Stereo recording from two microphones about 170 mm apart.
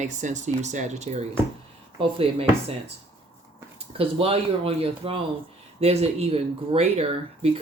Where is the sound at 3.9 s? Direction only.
35° right (ahead or behind).